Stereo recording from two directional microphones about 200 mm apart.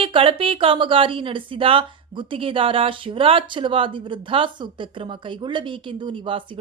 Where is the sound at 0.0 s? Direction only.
25° right (ahead or behind).